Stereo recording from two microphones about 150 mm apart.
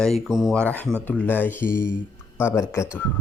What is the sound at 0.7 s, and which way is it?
Speech, 10° left (ahead or behind).